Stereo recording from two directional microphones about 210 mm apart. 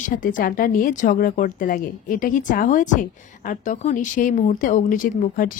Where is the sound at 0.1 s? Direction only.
40° left (ahead or behind).